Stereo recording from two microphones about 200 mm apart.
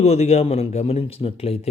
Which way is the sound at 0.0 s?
30° left (ahead or behind).